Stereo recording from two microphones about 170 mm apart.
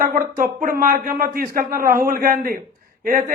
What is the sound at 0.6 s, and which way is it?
A man's voice, 55° right (ahead or behind).